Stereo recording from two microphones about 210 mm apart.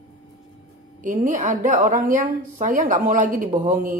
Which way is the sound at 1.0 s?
35° right (ahead or behind).